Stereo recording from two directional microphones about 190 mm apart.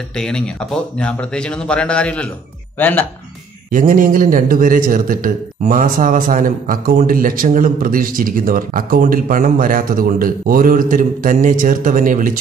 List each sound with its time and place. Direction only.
0.1 s speech: 5° left (ahead or behind)
3.7 s a man's voice: 45° right (ahead or behind)